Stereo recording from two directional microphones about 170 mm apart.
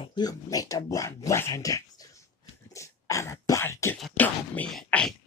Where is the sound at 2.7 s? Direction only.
20° left (ahead or behind).